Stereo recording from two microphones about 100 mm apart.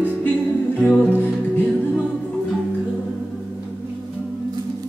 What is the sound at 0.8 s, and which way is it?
Music, 20° left (ahead or behind).